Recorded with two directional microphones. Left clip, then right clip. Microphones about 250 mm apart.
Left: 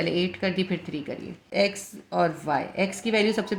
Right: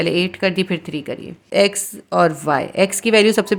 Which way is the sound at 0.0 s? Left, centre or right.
Right.